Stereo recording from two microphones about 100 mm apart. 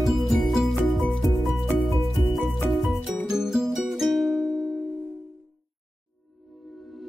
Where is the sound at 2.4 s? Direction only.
Centre (ahead or behind).